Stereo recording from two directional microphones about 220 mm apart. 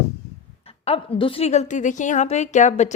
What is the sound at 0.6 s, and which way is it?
A woman's voice, 25° left (ahead or behind).